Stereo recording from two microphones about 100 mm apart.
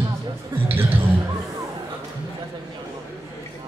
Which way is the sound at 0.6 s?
20° right (ahead or behind).